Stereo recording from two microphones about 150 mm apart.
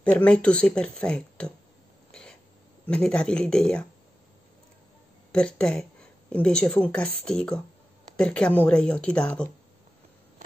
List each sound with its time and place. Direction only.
0.0 s speech: 10° left (ahead or behind)
2.9 s speech: 5° left (ahead or behind)
5.3 s speech: 5° left (ahead or behind)